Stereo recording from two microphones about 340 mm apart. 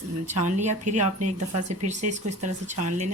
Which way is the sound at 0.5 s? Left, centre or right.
Right.